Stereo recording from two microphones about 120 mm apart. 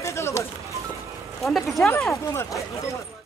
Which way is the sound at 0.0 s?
20° left (ahead or behind).